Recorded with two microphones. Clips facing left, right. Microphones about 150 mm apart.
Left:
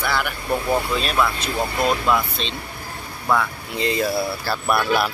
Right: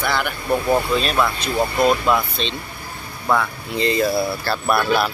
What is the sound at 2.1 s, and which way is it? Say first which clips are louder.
Speech: right 1 dB; centre (ahead or behind).